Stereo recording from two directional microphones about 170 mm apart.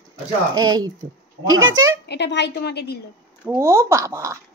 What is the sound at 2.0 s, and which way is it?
Speech, 80° left.